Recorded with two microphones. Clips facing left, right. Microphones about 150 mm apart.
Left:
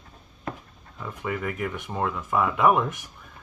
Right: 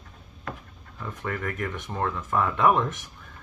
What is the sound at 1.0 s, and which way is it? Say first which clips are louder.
Speech: left 2 dB; 5° left (ahead or behind).